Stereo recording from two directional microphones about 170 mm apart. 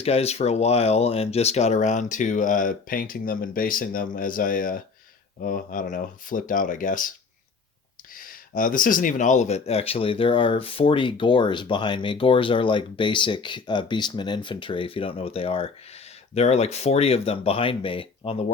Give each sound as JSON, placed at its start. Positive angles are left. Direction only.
{"t": 0.0, "sound": "speech", "side_deg": 35}
{"t": 8.1, "sound": "speech", "side_deg": 55}